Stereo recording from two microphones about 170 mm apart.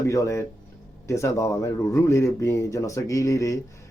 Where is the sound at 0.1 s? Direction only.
20° left (ahead or behind).